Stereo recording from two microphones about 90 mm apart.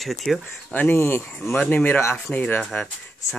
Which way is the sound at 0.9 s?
25° left (ahead or behind).